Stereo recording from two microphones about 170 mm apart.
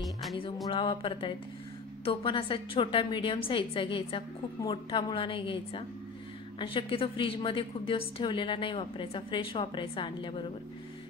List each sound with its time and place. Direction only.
0.0 s music: centre (ahead or behind)
0.7 s a woman's voice: 30° left (ahead or behind)